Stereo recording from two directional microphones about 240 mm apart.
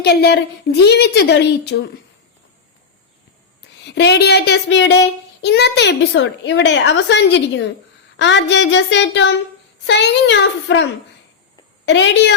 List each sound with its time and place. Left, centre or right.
0.0 s child singing: left
3.8 s child singing: left
11.9 s child singing: left